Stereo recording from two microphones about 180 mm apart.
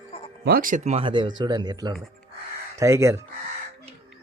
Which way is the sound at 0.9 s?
25° right (ahead or behind).